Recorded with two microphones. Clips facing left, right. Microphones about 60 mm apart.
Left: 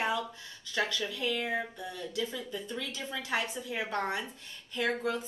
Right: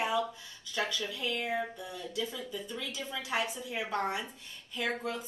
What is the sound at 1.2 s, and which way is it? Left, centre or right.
A woman's voice, centre.